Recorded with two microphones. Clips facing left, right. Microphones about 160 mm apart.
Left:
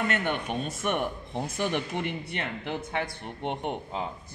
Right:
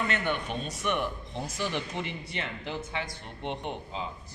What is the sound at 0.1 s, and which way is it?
Speech, 50° left (ahead or behind).